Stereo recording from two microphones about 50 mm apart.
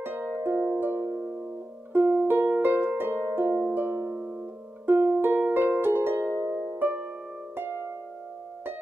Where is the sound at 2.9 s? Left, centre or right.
Right.